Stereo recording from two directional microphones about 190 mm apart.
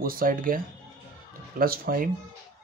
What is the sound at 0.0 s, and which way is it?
Speech, 50° right (ahead or behind).